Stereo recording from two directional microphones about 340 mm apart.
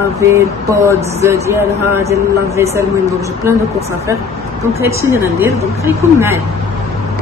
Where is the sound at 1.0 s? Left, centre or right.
Centre.